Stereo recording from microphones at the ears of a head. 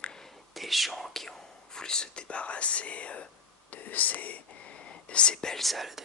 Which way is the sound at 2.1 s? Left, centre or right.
Left.